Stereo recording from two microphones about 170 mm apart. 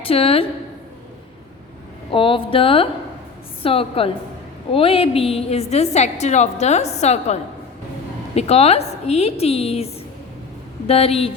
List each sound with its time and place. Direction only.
0.0 s a woman's voice: 35° left (ahead or behind)
2.0 s a woman's voice: 30° left (ahead or behind)
8.4 s a woman's voice: 35° left (ahead or behind)